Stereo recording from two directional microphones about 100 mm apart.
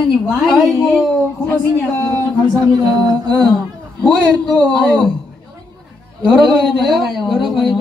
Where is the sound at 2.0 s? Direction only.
15° left (ahead or behind).